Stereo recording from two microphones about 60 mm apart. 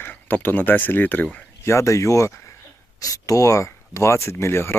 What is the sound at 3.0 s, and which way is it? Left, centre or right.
Speech, left.